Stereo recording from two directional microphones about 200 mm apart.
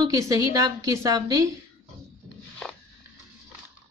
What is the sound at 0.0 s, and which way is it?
A woman's voice, 15° right (ahead or behind).